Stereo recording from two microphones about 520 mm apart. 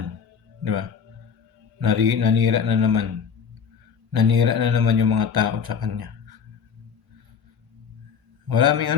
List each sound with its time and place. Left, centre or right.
0.6 s a man's voice: right
4.1 s speech: right
8.4 s speech: right